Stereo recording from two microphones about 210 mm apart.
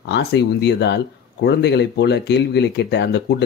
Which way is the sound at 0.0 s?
55° left (ahead or behind).